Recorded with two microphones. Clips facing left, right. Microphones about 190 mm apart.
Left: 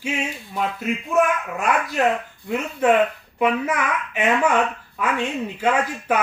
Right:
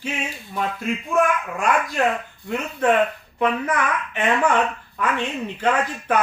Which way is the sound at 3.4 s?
10° left (ahead or behind).